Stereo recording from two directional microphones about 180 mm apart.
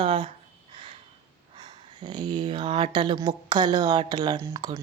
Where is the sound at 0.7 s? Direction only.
30° right (ahead or behind).